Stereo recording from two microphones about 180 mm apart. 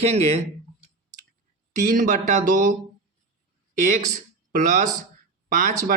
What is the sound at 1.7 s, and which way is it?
Speech, 45° right (ahead or behind).